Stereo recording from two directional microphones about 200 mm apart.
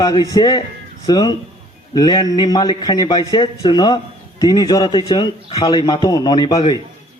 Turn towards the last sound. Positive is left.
turn(degrees=20)  # may be behind; listen again after turning